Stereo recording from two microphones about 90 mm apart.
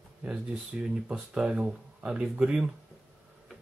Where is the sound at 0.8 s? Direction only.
10° right (ahead or behind).